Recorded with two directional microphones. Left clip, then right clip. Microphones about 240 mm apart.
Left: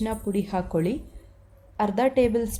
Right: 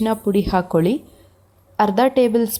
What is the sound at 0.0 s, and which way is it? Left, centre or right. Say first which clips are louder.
Speech: right 9 dB; right.